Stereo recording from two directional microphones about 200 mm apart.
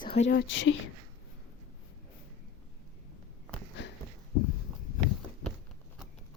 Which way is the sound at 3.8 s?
60° left (ahead or behind).